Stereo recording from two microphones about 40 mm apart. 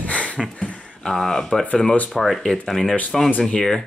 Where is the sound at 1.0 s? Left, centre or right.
Centre.